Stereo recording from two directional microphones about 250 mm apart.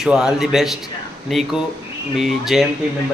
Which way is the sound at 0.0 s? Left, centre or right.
Centre.